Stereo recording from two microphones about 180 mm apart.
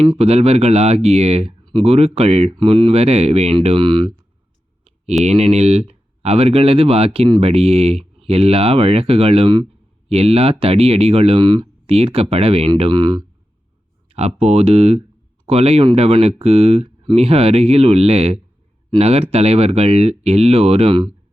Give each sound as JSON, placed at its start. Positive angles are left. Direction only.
{"t": 0.2, "sound": "speech", "side_deg": -35}
{"t": 5.2, "sound": "speech", "side_deg": -35}
{"t": 14.1, "sound": "speech", "side_deg": -35}